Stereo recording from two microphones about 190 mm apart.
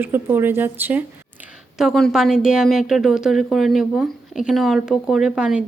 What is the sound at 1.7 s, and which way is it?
Speech, centre (ahead or behind).